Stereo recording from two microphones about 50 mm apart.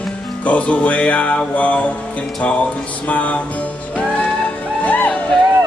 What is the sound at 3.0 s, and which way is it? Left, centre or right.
Music, left.